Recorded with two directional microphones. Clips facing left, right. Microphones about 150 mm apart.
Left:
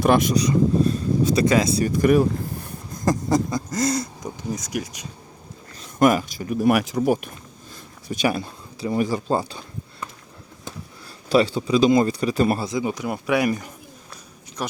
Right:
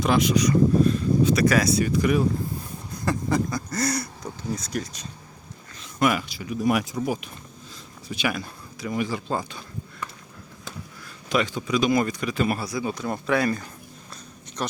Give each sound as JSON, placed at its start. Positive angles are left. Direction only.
{"t": 0.0, "sound": "speech", "side_deg": 50}
{"t": 0.3, "sound": "speech", "side_deg": 35}
{"t": 1.5, "sound": "speech", "side_deg": 25}
{"t": 1.8, "sound": "speech", "side_deg": 50}
{"t": 3.5, "sound": "speech", "side_deg": 20}
{"t": 6.0, "sound": "speech", "side_deg": 45}
{"t": 6.6, "sound": "speech", "side_deg": 65}
{"t": 8.1, "sound": "speech", "side_deg": 40}
{"t": 8.4, "sound": "speech", "side_deg": 30}
{"t": 11.3, "sound": "speech", "side_deg": 30}
{"t": 12.6, "sound": "speech", "side_deg": 20}